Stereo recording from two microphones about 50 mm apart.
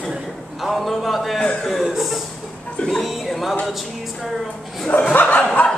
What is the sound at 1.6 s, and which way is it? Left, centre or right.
Chuckle, centre.